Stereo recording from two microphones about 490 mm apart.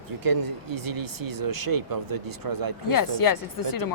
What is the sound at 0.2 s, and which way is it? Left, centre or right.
Speech, right.